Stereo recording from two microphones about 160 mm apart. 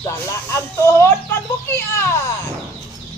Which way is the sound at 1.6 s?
15° left (ahead or behind).